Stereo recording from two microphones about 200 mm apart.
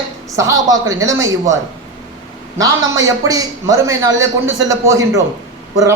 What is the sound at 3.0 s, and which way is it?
A man's voice, 20° right (ahead or behind).